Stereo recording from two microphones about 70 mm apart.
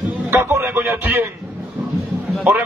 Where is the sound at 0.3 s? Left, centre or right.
Right.